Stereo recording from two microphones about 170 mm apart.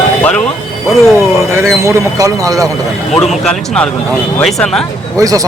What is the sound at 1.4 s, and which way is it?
Speech, 15° right (ahead or behind).